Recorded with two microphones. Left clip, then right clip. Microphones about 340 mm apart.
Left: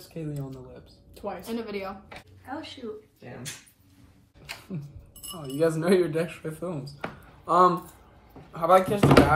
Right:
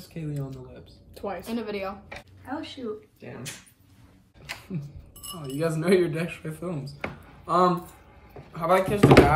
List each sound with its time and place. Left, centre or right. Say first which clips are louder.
0.1 s speech: even; centre
4.7 s speech: right 2 dB; centre